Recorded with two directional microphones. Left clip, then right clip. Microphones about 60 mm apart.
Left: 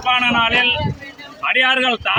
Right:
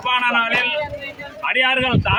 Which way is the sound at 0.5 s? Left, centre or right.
Right.